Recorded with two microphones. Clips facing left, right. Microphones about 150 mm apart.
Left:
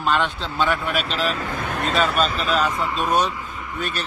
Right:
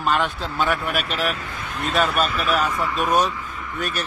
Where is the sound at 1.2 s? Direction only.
45° left (ahead or behind).